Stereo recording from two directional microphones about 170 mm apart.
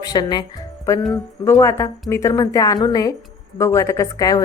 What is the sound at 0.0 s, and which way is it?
A woman's voice, 25° left (ahead or behind).